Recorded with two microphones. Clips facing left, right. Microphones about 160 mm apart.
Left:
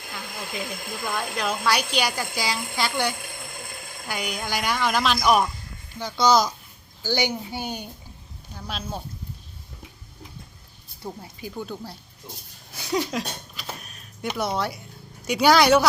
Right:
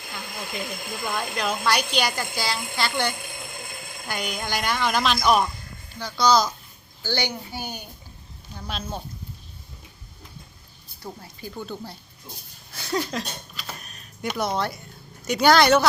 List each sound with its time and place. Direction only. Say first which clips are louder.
0.0 s speech: even; centre (ahead or behind)
6.0 s a child's voice: left 1 dB; 20° left (ahead or behind)
8.5 s speech: even; 5° left (ahead or behind)
11.0 s speech: left 2 dB; 15° left (ahead or behind)
12.7 s a sound: left 1 dB; 15° left (ahead or behind)
13.0 s speech: left 1 dB; 5° left (ahead or behind)
13.7 s a sound: left 1 dB; 5° left (ahead or behind)
15.2 s speech: even; 10° left (ahead or behind)